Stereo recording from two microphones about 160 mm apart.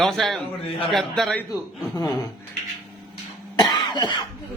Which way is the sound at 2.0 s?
20° left (ahead or behind).